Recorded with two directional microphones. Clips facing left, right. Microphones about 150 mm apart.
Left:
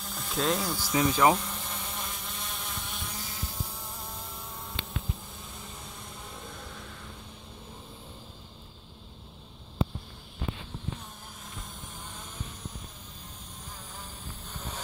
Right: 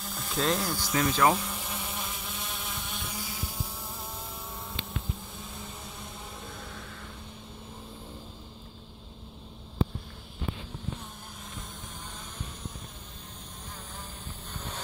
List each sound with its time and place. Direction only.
0.0 s speech: centre (ahead or behind)
0.9 s speech: 10° left (ahead or behind)
1.3 s insect: 5° right (ahead or behind)